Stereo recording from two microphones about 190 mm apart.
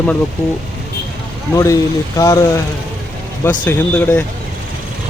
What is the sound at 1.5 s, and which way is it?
Speech, 15° left (ahead or behind).